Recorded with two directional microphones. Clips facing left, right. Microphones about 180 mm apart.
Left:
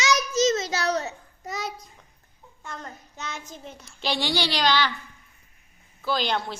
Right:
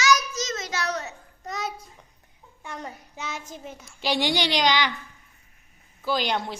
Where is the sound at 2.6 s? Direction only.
15° right (ahead or behind).